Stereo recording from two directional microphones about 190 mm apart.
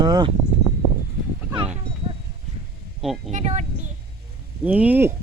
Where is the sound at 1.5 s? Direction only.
30° right (ahead or behind).